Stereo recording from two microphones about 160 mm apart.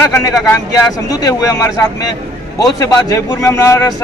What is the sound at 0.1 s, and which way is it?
A man's voice, 15° left (ahead or behind).